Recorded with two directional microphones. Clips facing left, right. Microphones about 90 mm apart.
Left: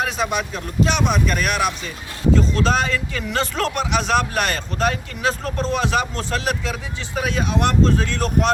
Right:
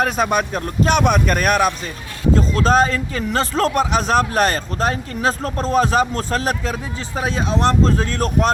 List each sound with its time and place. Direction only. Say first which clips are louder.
0.0 s a man's voice: right 4 dB; 50° right (ahead or behind)